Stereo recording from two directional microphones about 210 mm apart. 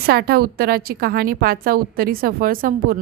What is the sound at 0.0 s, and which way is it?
A woman's voice, 45° right (ahead or behind).